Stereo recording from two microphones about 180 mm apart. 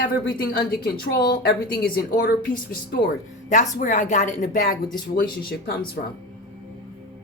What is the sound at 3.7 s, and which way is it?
A woman's voice, 45° left (ahead or behind).